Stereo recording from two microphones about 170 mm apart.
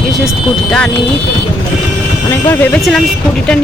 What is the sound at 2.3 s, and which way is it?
Speech, 15° left (ahead or behind).